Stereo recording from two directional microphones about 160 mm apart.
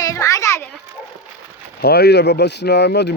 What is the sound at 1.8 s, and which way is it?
Speech, 85° left.